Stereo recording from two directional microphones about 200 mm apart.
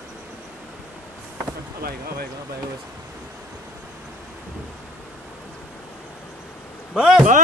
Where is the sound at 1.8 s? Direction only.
50° right (ahead or behind).